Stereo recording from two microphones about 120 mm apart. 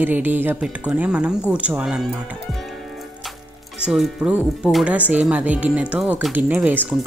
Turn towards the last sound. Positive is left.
turn(degrees=-15)  # may be behind; listen again after turning